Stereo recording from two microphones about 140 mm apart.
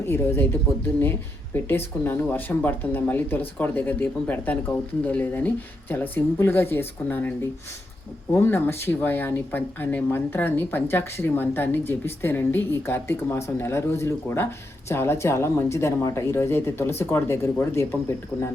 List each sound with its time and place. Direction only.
0.0 s speech: 15° left (ahead or behind)